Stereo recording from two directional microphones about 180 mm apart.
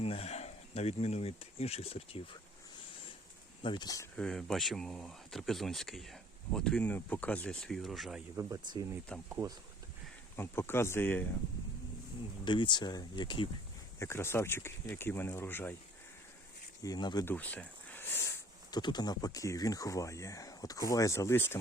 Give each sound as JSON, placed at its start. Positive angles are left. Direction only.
{"t": 0.0, "sound": "speech", "side_deg": 35}
{"t": 3.6, "sound": "speech", "side_deg": 25}
{"t": 4.2, "sound": "speech", "side_deg": 5}
{"t": 8.4, "sound": "speech", "side_deg": -15}
{"t": 10.3, "sound": "speech", "side_deg": 15}
{"t": 12.5, "sound": "speech", "side_deg": 25}
{"t": 14.0, "sound": "speech", "side_deg": 15}
{"t": 16.8, "sound": "speech", "side_deg": 20}
{"t": 17.2, "sound": "speech", "side_deg": 10}